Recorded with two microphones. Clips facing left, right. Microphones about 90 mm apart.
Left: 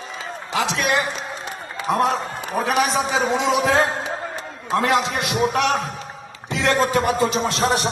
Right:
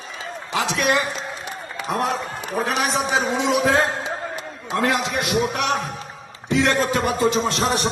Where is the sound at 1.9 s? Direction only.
30° left (ahead or behind).